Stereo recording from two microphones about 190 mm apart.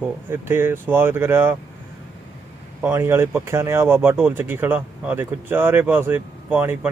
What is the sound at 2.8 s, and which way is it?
Speech, 15° right (ahead or behind).